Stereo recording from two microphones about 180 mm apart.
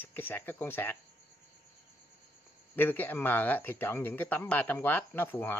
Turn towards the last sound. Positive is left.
turn(degrees=10)  # may be behind; listen again after turning